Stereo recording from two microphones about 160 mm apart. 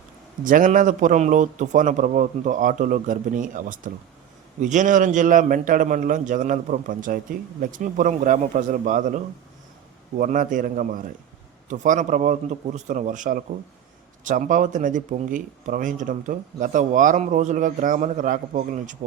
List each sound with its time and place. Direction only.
0.4 s a man's voice: 55° right (ahead or behind)